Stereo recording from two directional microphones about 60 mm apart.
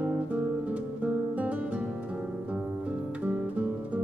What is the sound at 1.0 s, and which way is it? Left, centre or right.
Music, right.